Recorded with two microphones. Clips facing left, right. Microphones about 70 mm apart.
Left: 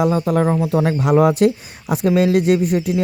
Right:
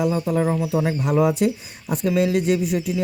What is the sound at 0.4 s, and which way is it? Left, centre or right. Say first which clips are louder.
Speech: left 4 dB; left.